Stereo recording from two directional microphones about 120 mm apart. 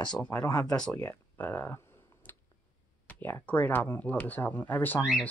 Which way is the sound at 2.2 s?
15° left (ahead or behind).